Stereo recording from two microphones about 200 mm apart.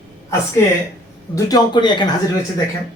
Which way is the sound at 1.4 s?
20° left (ahead or behind).